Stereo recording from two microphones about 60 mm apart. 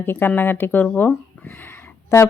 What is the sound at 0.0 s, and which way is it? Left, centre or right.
A woman's voice, left.